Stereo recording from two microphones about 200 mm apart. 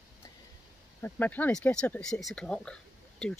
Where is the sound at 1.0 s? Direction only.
10° left (ahead or behind).